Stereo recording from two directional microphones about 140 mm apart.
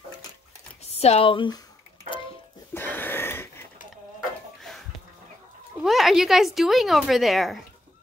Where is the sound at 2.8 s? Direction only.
15° left (ahead or behind).